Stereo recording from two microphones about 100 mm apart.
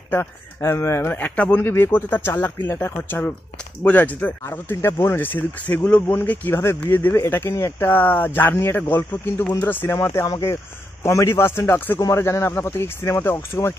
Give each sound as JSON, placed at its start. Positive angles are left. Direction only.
{"t": 0.1, "sound": "speech", "side_deg": 25}